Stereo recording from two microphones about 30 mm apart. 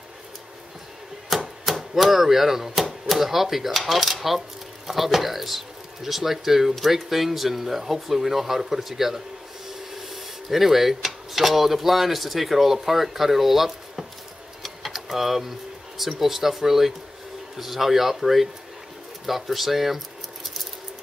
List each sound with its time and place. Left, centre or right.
1.3 s chopping: centre
1.7 s speech: centre
14.6 s a sound: centre
16.2 s speech: centre